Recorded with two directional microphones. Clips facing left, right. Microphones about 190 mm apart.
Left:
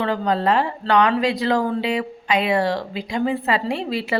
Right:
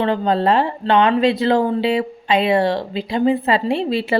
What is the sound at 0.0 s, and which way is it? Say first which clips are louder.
Speech: right 3 dB; 25° right (ahead or behind).